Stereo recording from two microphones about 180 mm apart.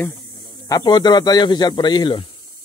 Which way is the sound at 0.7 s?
20° left (ahead or behind).